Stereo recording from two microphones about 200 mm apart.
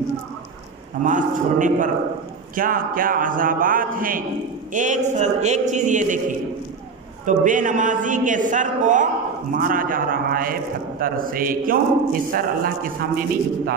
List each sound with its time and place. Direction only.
1.0 s a man's voice: 40° right (ahead or behind)